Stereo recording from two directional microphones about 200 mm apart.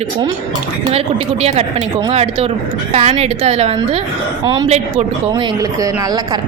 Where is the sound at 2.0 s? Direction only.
30° right (ahead or behind).